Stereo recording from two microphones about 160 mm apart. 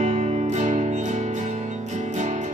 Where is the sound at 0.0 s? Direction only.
45° right (ahead or behind).